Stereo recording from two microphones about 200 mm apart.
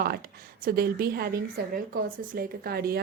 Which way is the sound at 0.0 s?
50° right (ahead or behind).